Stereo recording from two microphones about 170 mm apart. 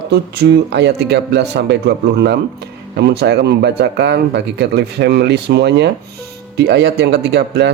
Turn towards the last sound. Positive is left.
turn(degrees=-80)